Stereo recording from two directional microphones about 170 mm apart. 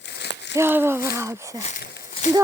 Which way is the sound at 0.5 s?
15° right (ahead or behind).